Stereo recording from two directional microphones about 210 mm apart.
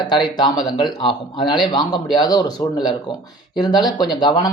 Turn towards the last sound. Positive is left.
turn(degrees=20)  # may be behind; listen again after turning